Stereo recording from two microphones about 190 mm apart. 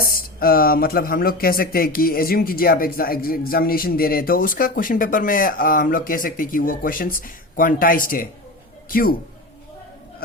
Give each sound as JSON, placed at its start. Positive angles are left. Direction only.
{"t": 0.1, "sound": "speech", "side_deg": 50}